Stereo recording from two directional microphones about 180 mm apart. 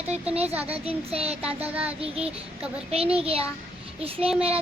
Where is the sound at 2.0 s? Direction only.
35° right (ahead or behind).